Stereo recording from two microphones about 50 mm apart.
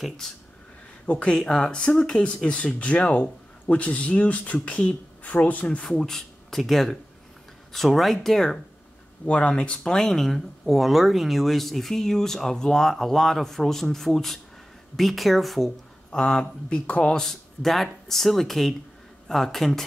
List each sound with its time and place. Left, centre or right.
1.0 s speech: left
1.3 s speech: centre
5.9 s speech: centre
9.2 s speech: left; by 15.7 s centre
16.1 s speech: centre
17.2 s speech: centre